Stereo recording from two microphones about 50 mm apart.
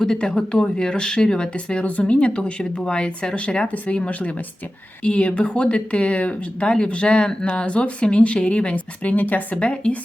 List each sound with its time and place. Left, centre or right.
0.0 s speech: centre; by 9.6 s left
9.6 s speech: left